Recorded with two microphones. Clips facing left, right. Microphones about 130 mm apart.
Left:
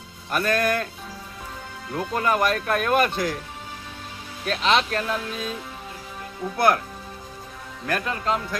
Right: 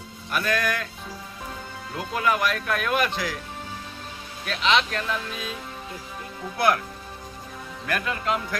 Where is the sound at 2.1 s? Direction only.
40° left (ahead or behind).